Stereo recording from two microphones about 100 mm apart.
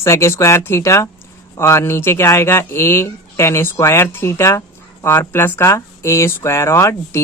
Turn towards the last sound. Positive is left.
turn(degrees=30)  # may be behind; listen again after turning